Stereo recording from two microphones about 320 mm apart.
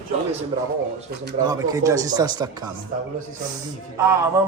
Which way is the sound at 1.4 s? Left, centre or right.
Centre.